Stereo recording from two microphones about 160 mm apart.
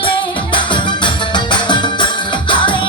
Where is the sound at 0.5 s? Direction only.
30° left (ahead or behind).